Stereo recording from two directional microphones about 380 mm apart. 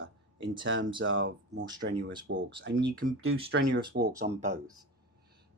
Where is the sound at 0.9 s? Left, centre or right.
Right.